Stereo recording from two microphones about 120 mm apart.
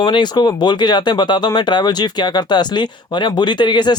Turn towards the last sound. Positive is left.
turn(degrees=40)  # may be behind; listen again after turning